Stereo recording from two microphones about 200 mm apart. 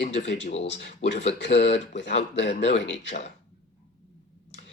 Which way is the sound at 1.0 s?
60° left (ahead or behind).